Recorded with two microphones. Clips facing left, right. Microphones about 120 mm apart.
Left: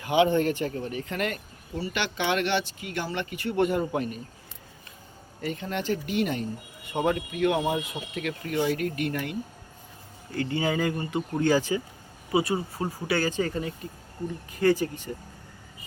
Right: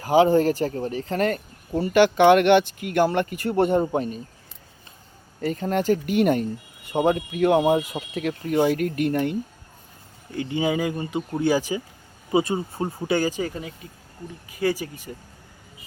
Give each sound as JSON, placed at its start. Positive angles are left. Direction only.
{"t": 0.0, "sound": "speech", "side_deg": -35}
{"t": 5.4, "sound": "speech", "side_deg": -40}
{"t": 6.9, "sound": "speech", "side_deg": -35}
{"t": 7.4, "sound": "speech", "side_deg": -45}
{"t": 10.3, "sound": "speech", "side_deg": -15}
{"t": 12.3, "sound": "speech", "side_deg": -25}